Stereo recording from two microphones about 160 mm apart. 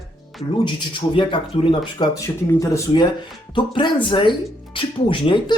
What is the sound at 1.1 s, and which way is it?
Speech, 30° left (ahead or behind).